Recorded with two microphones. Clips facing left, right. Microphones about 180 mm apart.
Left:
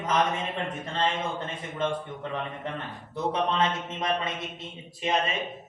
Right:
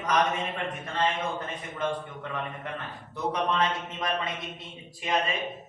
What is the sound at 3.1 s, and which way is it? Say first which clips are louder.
Speech: left 1 dB; 25° left (ahead or behind).